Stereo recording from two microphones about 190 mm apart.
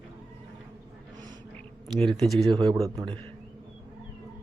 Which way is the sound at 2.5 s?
25° right (ahead or behind).